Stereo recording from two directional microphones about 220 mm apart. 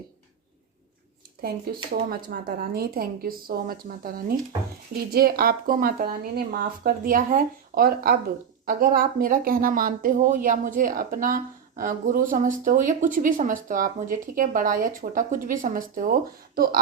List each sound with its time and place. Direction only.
1.4 s a woman's voice: 45° right (ahead or behind)